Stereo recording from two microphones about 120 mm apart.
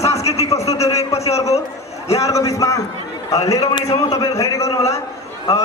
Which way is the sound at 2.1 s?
25° left (ahead or behind).